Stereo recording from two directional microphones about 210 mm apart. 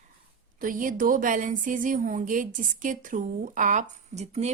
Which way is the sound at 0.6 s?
40° right (ahead or behind).